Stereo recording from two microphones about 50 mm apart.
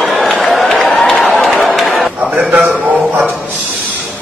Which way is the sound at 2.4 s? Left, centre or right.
Right.